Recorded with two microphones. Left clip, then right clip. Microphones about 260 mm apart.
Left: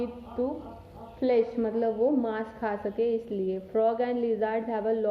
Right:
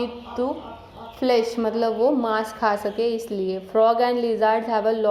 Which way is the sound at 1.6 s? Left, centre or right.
Centre.